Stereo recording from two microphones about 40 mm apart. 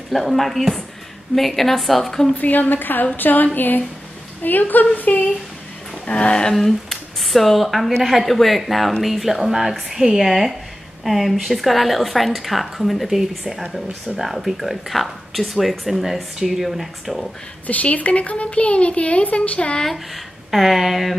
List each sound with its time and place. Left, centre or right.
0.1 s speech: centre
2.3 s a woman's voice: left
6.0 s speech: left
6.5 s speech: centre
17.6 s speech: left
20.5 s speech: centre